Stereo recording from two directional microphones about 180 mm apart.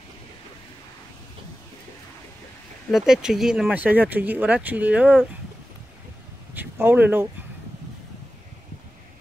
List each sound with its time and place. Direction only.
2.9 s speech: 5° right (ahead or behind)
6.5 s speech: 10° right (ahead or behind)